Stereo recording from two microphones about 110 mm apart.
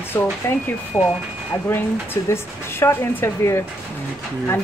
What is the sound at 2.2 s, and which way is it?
A woman's voice, 25° left (ahead or behind).